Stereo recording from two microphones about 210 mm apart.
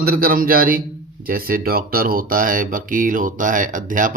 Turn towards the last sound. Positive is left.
turn(degrees=-40)  # may be behind; listen again after turning